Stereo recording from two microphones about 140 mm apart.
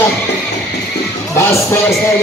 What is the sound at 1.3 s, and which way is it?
Music, 20° left (ahead or behind).